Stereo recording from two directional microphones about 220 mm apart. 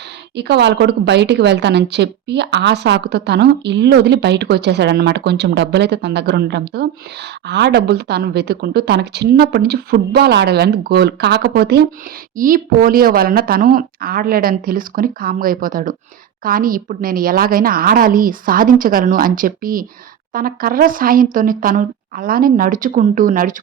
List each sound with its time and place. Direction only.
0.3 s a woman's voice: 50° right (ahead or behind)